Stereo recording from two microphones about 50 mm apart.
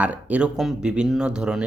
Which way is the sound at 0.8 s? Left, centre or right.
Centre.